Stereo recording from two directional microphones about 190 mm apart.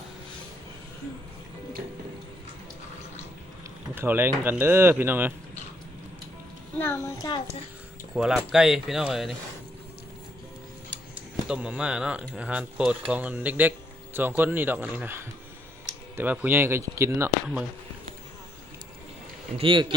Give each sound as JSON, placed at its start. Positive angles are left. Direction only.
{"t": 3.9, "sound": "a man's voice", "side_deg": -10}
{"t": 6.7, "sound": "a child's voice", "side_deg": 10}
{"t": 8.1, "sound": "speech", "side_deg": 0}
{"t": 11.4, "sound": "a man's voice", "side_deg": -5}
{"t": 19.5, "sound": "speech", "side_deg": -25}